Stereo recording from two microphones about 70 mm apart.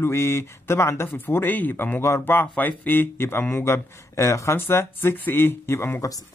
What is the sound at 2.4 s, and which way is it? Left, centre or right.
Speech, left.